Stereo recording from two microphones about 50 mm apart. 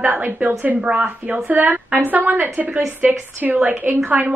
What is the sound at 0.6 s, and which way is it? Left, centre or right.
A woman's voice, right.